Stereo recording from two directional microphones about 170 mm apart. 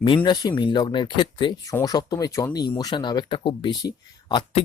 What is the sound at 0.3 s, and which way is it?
Speech, 30° left (ahead or behind).